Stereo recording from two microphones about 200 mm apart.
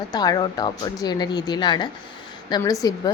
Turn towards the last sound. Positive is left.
turn(degrees=20)  # may be behind; listen again after turning